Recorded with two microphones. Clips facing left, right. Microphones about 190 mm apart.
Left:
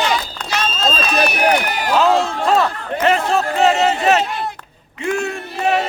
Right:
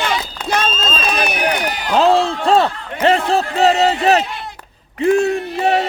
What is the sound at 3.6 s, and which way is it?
Battle cry, 35° right (ahead or behind).